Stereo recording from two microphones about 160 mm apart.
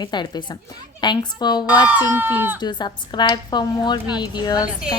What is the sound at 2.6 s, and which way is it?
A woman's voice, 30° left (ahead or behind).